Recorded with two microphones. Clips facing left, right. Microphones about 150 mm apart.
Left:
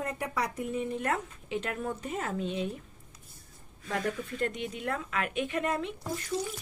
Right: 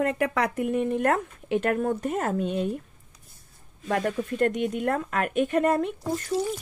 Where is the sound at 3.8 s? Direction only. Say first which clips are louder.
Right 6 dB; 55° right (ahead or behind).